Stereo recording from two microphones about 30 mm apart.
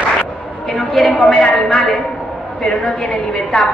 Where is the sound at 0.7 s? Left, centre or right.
Centre.